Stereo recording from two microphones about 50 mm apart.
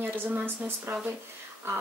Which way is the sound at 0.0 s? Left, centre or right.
Right.